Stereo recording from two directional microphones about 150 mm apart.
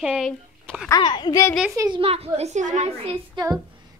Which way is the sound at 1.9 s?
40° right (ahead or behind).